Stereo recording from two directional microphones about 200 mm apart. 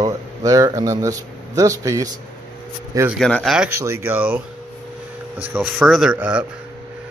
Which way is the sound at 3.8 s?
10° right (ahead or behind).